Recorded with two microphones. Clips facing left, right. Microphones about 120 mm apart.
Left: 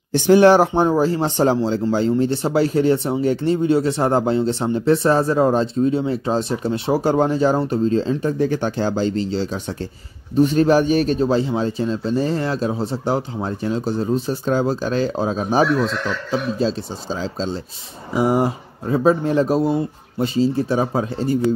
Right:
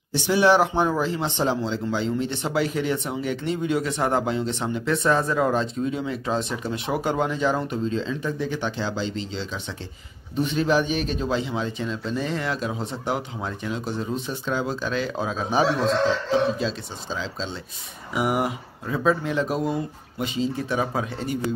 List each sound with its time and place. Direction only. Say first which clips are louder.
0.1 s speech: left 7 dB; 50° left (ahead or behind)
0.7 s speech: left 6 dB; 30° left (ahead or behind)
15.7 s speech: left 1 dB; 90° left
16.5 s speech: left 7 dB; 35° left (ahead or behind)
18.1 s speech: left 6 dB; 30° left (ahead or behind)